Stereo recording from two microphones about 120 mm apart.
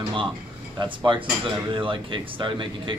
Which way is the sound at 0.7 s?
40° right (ahead or behind).